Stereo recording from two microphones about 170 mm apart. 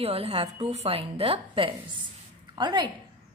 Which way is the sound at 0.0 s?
35° right (ahead or behind).